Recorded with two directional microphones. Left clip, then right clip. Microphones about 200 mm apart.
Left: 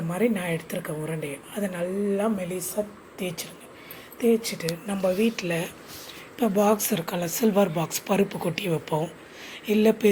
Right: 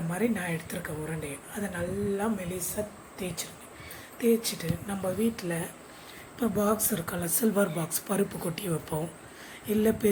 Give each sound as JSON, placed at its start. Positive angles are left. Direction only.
{"t": 0.1, "sound": "a woman's voice", "side_deg": 20}
{"t": 4.2, "sound": "a woman's voice", "side_deg": 15}